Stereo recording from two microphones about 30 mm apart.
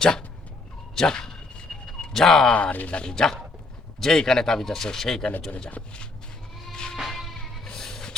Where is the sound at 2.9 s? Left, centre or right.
Left.